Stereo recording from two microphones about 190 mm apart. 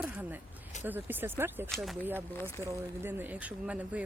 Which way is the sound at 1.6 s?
Centre (ahead or behind).